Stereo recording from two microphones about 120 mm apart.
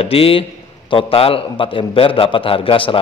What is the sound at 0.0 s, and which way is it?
A man's voice, 50° left (ahead or behind).